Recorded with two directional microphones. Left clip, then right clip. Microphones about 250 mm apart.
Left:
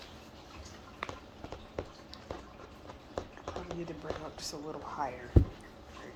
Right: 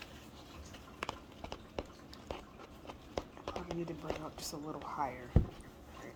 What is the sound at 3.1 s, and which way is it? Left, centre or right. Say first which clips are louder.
Speech: left 1 dB; right.